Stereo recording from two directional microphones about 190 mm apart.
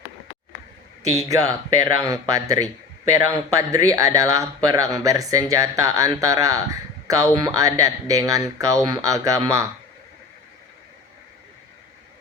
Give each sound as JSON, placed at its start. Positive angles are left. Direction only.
{"t": 1.1, "sound": "a man's voice", "side_deg": -15}